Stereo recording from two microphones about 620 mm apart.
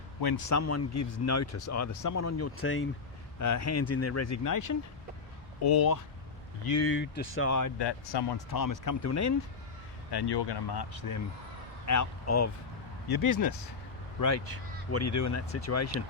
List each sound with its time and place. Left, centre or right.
0.2 s speech: left
0.6 s speech: left
6.7 s speech: centre
10.1 s speech: left